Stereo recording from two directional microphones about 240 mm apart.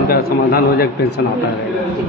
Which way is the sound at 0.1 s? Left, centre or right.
Left.